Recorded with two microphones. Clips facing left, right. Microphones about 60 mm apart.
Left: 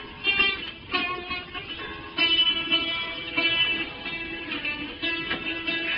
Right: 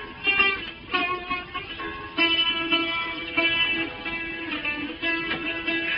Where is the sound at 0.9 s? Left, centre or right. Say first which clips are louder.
Right 3 dB; centre.